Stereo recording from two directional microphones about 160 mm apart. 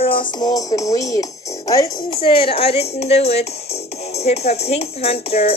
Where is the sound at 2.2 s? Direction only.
35° left (ahead or behind).